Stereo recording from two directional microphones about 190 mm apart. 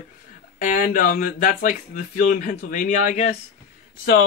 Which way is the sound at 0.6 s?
45° left (ahead or behind).